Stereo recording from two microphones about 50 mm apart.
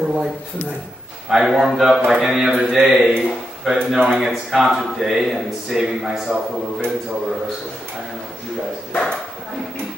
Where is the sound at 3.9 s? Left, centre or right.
Centre.